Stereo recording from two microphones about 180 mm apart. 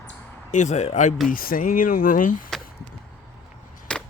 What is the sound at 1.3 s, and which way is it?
Speech, 50° left (ahead or behind).